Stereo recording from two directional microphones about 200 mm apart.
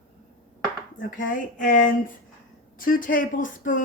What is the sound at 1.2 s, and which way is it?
Speech, 40° left (ahead or behind).